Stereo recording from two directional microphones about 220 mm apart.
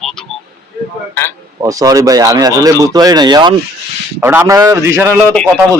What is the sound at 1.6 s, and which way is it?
Speech, 15° right (ahead or behind).